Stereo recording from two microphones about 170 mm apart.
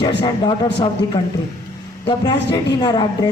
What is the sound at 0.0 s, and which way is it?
A man's voice, 25° left (ahead or behind).